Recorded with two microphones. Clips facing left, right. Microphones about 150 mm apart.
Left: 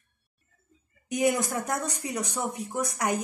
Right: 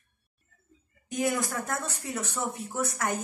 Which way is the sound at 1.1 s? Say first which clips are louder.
Left 3 dB; 20° left (ahead or behind).